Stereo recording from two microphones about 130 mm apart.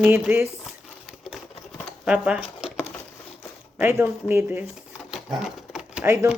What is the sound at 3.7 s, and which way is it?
Speech, 15° right (ahead or behind).